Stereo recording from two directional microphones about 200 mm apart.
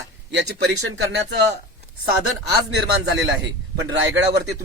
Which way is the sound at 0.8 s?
75° right (ahead or behind).